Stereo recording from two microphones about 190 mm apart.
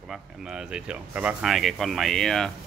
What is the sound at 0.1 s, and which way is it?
Speech, 5° right (ahead or behind).